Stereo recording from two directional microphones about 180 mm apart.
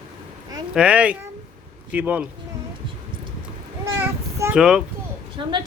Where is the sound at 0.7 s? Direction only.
5° right (ahead or behind).